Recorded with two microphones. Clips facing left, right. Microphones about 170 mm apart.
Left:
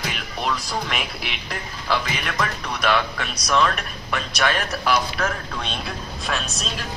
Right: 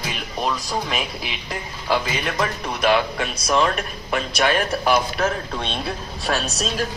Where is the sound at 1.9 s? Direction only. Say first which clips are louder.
Right 3 dB; 25° right (ahead or behind).